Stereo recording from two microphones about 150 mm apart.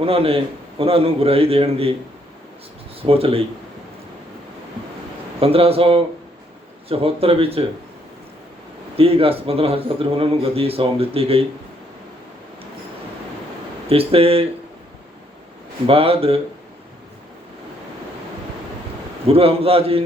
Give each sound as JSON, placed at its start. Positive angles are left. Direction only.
{"t": 0.0, "sound": "a man's voice", "side_deg": -40}
{"t": 3.0, "sound": "a man's voice", "side_deg": -40}
{"t": 5.4, "sound": "a man's voice", "side_deg": -40}
{"t": 9.0, "sound": "a man's voice", "side_deg": -40}
{"t": 13.8, "sound": "a man's voice", "side_deg": -40}
{"t": 15.9, "sound": "a man's voice", "side_deg": -40}
{"t": 19.3, "sound": "a man's voice", "side_deg": -40}